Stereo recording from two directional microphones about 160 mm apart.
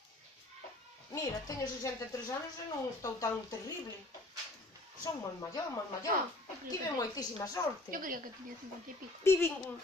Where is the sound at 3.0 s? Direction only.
20° left (ahead or behind).